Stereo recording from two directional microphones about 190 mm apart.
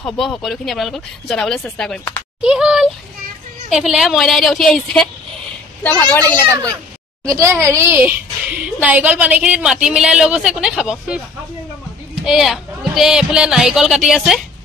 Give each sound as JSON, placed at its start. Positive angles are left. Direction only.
{"t": 0.0, "sound": "a woman's voice", "side_deg": 0}
{"t": 2.4, "sound": "a woman's voice", "side_deg": -5}
{"t": 7.2, "sound": "a child's voice", "side_deg": -15}
{"t": 12.3, "sound": "a woman's voice", "side_deg": 0}